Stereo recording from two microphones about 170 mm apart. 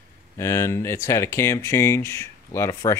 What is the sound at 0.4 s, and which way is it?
Speech, 15° left (ahead or behind).